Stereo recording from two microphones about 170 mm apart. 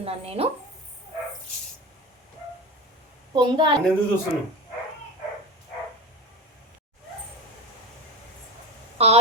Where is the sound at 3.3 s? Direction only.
30° right (ahead or behind).